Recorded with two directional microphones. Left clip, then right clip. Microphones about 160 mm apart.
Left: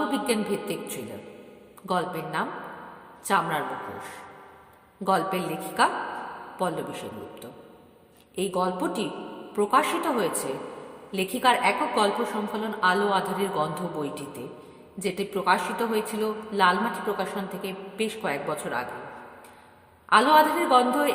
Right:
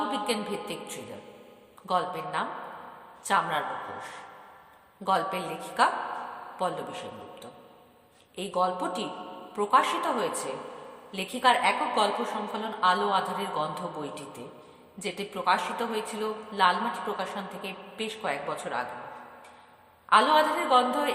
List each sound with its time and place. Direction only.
0.1 s a man's voice: 30° left (ahead or behind)
5.0 s a woman's voice: 35° left (ahead or behind)
20.1 s a woman's voice: 30° left (ahead or behind)